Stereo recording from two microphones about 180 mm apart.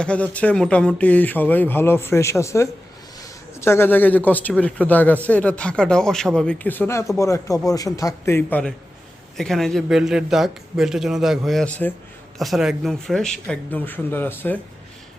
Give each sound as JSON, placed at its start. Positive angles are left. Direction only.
{"t": 0.0, "sound": "a man's voice", "side_deg": 5}